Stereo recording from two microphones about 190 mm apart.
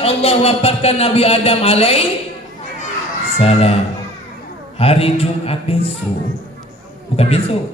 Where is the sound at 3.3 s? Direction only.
30° left (ahead or behind).